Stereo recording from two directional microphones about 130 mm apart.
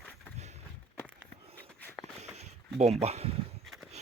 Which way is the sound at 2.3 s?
55° right (ahead or behind).